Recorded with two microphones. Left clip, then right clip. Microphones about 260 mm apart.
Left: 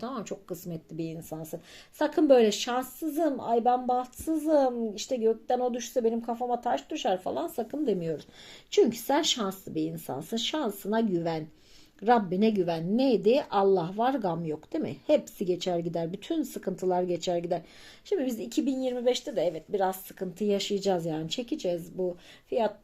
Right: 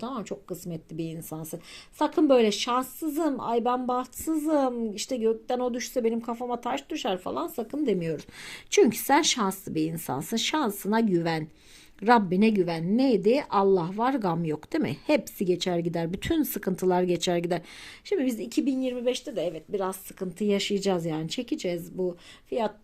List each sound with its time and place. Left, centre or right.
0.0 s a woman's voice: centre